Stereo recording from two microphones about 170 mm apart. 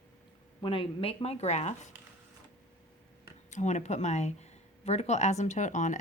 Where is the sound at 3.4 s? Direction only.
45° left (ahead or behind).